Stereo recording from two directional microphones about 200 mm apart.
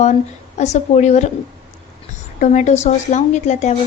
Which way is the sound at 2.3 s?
35° left (ahead or behind).